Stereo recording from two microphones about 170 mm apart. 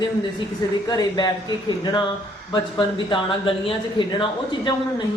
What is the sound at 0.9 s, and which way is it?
Speech, 25° left (ahead or behind).